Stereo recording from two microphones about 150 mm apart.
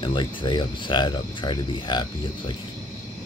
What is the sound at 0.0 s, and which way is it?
Speech, 30° left (ahead or behind).